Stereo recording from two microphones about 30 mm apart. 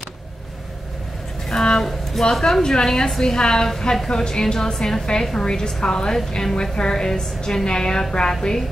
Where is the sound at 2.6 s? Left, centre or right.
Centre.